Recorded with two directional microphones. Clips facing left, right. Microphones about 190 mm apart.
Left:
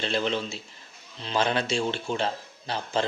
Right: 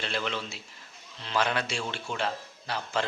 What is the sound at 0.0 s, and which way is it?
A man's voice, 25° left (ahead or behind).